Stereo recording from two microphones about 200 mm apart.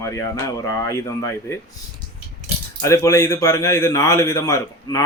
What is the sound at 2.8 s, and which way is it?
Speech, 15° left (ahead or behind).